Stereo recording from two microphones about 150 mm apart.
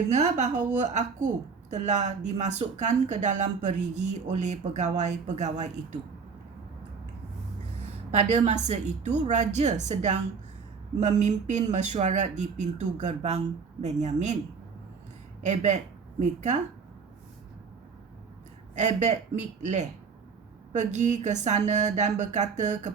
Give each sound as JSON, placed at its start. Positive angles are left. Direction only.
{"t": 0.1, "sound": "speech", "side_deg": -50}
{"t": 8.1, "sound": "speech", "side_deg": -50}
{"t": 15.4, "sound": "speech", "side_deg": -50}
{"t": 18.7, "sound": "speech", "side_deg": -55}